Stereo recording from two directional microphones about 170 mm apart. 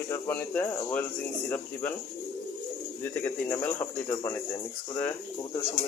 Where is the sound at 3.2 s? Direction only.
15° left (ahead or behind).